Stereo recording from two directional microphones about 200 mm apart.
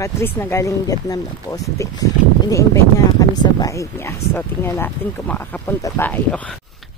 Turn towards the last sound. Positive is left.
turn(degrees=5)  # may be behind; listen again after turning